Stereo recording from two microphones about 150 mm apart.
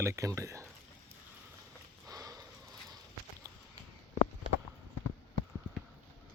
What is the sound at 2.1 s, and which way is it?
Sniff, 25° right (ahead or behind).